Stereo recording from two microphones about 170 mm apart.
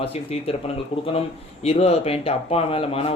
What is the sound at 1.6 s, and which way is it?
Speech, 35° left (ahead or behind).